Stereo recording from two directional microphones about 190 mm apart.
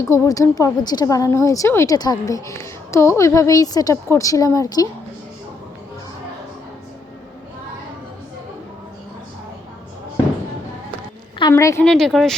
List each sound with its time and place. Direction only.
0.0 s a woman's voice: 15° left (ahead or behind)
11.5 s a woman's voice: 15° left (ahead or behind)
11.9 s speech: centre (ahead or behind)